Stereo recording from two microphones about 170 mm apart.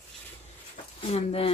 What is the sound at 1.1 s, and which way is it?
Speech, 35° left (ahead or behind).